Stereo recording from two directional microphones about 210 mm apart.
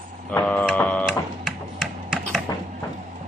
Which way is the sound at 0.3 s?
10° left (ahead or behind).